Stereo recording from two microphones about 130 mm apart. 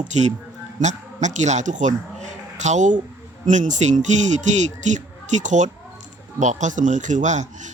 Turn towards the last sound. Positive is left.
turn(degrees=-70)  # may be behind; listen again after turning